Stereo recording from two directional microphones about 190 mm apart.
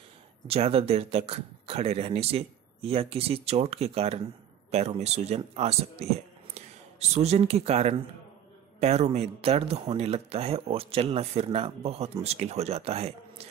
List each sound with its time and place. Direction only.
0.5 s speech: 30° right (ahead or behind)